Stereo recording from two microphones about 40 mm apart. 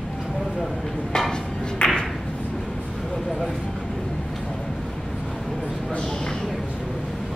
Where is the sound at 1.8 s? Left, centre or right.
Left.